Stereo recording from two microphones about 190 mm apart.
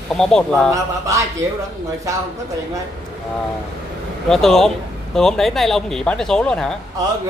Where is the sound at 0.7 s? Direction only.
15° right (ahead or behind).